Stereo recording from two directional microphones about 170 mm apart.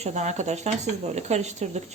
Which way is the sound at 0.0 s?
40° right (ahead or behind).